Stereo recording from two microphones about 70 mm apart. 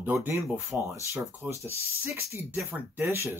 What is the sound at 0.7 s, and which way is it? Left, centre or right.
Speech, right.